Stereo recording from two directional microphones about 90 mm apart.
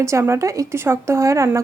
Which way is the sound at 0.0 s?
30° right (ahead or behind).